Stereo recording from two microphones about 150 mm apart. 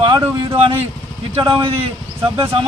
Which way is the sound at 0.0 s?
30° right (ahead or behind).